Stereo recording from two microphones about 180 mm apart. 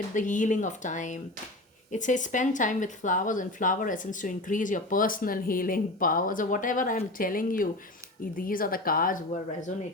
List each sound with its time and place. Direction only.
0.1 s speech: 45° left (ahead or behind)